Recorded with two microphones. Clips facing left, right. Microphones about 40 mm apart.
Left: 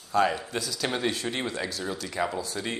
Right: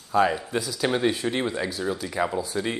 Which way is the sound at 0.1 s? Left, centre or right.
Centre.